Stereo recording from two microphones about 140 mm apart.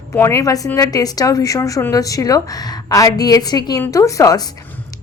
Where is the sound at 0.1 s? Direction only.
20° left (ahead or behind).